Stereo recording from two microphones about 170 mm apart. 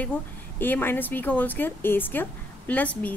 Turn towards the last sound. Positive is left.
turn(degrees=10)  # may be behind; listen again after turning